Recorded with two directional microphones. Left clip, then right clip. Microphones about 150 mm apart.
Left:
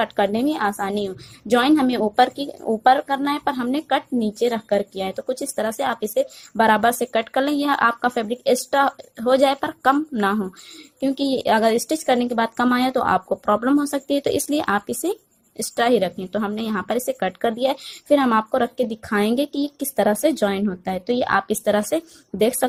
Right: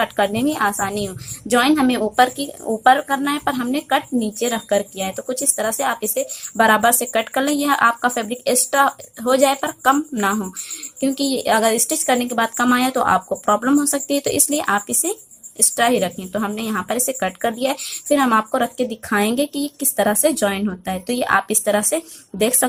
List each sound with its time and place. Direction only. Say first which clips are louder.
0.0 s speech: right 1 dB; 35° left (ahead or behind)